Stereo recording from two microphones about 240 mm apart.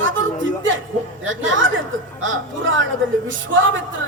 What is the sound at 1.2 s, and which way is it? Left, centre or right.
A man's voice, right.